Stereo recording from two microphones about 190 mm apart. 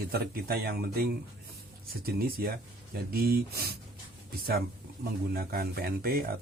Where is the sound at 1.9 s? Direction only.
55° right (ahead or behind).